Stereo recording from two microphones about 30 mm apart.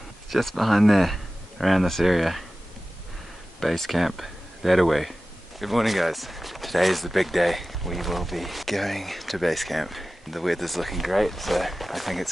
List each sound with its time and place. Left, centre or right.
0.3 s speech: centre
3.7 s speech: centre
4.0 s speech: centre